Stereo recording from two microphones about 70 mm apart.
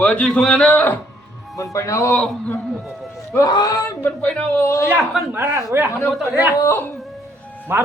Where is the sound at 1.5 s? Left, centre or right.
Left.